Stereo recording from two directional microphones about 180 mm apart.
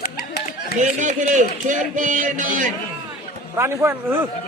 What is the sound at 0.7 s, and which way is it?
Speech, 45° right (ahead or behind).